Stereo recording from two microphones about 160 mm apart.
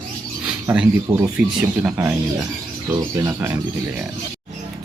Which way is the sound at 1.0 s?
20° right (ahead or behind).